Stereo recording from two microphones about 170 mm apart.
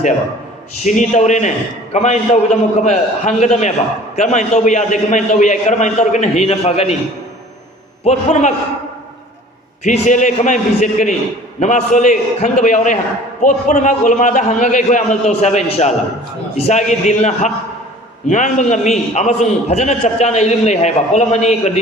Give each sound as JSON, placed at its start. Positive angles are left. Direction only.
{"t": 0.9, "sound": "a man's voice", "side_deg": 45}
{"t": 8.0, "sound": "a man's voice", "side_deg": 45}
{"t": 9.8, "sound": "a man's voice", "side_deg": 45}